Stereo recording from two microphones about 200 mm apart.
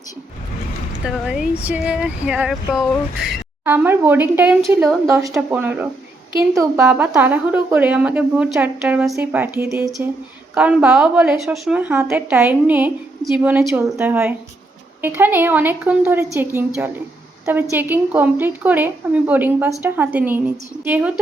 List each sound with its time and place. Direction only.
1.0 s speech: 5° right (ahead or behind)